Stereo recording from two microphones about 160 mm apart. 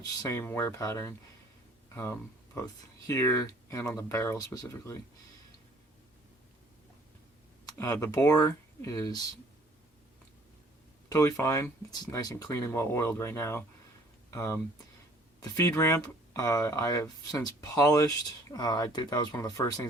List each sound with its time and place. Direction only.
0.0 s speech: 20° left (ahead or behind)
3.1 s speech: 20° left (ahead or behind)
7.6 s a sound: 20° left (ahead or behind)
7.9 s speech: 20° left (ahead or behind)
11.1 s speech: 20° left (ahead or behind)